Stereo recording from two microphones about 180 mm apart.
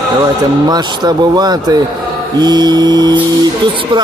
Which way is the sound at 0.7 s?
25° right (ahead or behind).